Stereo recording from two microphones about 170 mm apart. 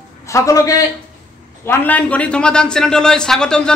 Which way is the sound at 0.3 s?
20° left (ahead or behind).